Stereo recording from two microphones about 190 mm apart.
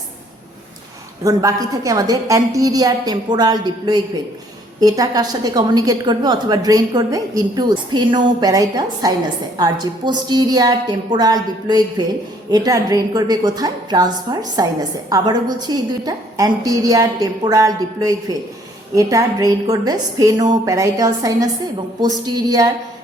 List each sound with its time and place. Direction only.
1.2 s a woman's voice: 20° right (ahead or behind)